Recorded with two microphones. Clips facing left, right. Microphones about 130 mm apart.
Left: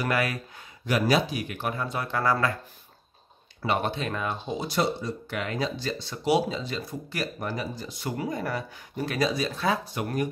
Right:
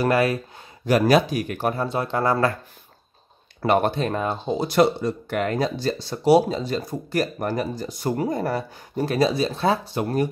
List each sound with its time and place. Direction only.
0.0 s speech: 30° right (ahead or behind)
0.8 s speech: 45° right (ahead or behind); by 2.5 s 25° right (ahead or behind)
3.6 s speech: 50° right (ahead or behind)
4.6 s speech: 60° right (ahead or behind); by 10.3 s 30° right (ahead or behind)